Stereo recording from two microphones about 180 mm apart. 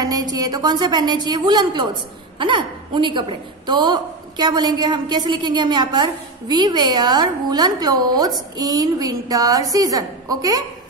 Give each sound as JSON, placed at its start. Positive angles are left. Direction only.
{"t": 0.0, "sound": "a woman's voice", "side_deg": -20}